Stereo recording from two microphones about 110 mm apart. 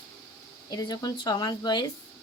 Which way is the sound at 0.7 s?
40° left (ahead or behind).